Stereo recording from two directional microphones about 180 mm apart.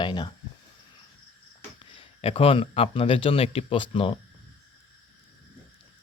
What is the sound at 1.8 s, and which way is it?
Speech, 30° left (ahead or behind).